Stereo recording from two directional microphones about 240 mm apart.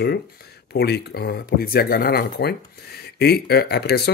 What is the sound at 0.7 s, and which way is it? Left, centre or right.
Speech, left.